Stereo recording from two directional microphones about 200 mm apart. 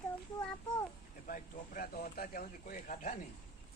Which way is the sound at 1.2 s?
45° left (ahead or behind).